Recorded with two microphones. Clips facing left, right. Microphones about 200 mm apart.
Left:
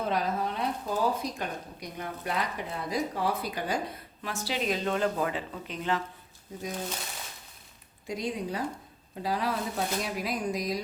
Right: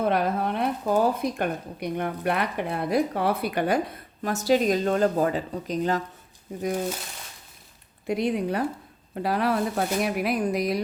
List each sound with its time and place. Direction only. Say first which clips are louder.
0.0 s speech: right 5 dB; 60° right (ahead or behind)
4.2 s speech: right 11 dB; 45° right (ahead or behind)
8.0 s speech: right 8 dB; 60° right (ahead or behind)